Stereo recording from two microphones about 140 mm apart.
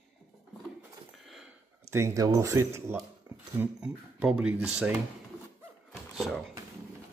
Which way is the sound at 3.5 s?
10° right (ahead or behind).